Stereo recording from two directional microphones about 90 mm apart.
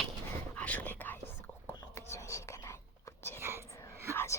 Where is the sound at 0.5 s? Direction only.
15° left (ahead or behind).